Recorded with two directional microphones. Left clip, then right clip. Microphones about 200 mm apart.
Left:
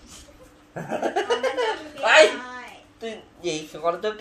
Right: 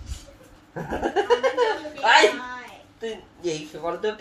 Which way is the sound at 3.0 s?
35° left (ahead or behind).